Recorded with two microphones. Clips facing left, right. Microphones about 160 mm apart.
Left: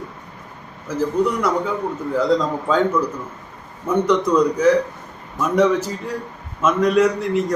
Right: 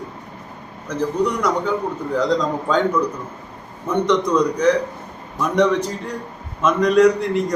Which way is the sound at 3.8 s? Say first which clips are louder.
Left 1 dB; 5° left (ahead or behind).